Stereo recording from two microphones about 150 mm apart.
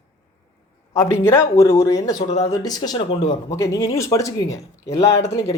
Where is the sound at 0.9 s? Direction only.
20° left (ahead or behind).